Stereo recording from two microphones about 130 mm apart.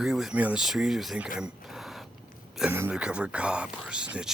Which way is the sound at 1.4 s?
Centre (ahead or behind).